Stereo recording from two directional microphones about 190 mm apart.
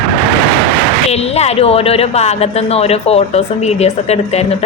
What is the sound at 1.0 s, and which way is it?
A woman's voice, 35° left (ahead or behind).